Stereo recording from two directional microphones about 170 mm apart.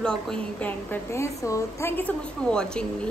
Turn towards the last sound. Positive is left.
turn(degrees=5)  # may be behind; listen again after turning